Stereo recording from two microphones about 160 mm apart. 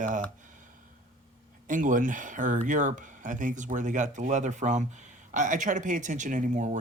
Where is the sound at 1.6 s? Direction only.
55° right (ahead or behind).